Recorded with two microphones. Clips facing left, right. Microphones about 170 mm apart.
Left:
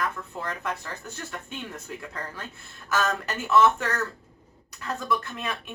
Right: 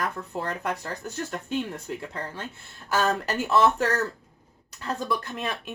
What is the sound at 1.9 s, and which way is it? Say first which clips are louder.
Speech: right 2 dB; 30° right (ahead or behind).